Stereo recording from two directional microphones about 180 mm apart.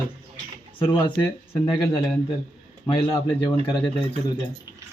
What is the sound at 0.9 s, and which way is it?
A man's voice, 25° left (ahead or behind).